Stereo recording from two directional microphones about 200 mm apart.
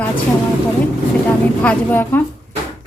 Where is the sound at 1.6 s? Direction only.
10° left (ahead or behind).